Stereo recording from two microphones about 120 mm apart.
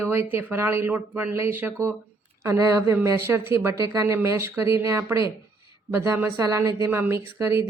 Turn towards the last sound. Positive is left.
turn(degrees=-20)  # may be behind; listen again after turning